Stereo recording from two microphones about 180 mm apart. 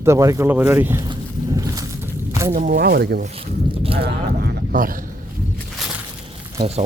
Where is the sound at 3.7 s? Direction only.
30° right (ahead or behind).